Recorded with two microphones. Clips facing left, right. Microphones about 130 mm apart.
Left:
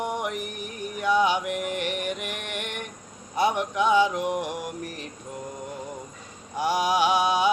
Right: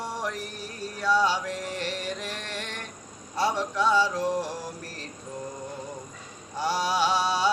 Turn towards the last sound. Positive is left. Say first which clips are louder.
# left 3 dB
turn(degrees=15)  # may be behind; listen again after turning